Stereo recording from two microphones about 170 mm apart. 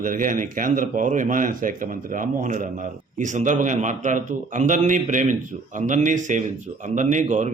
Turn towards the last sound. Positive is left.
turn(degrees=-45)  # may be behind; listen again after turning